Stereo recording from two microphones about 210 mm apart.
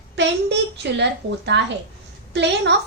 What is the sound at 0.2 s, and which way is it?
A woman's voice, 55° right (ahead or behind).